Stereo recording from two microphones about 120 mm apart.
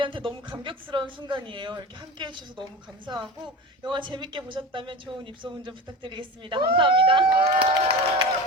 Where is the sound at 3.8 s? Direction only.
40° right (ahead or behind).